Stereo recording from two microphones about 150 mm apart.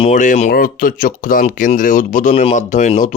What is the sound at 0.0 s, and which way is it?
Speech, 55° left (ahead or behind).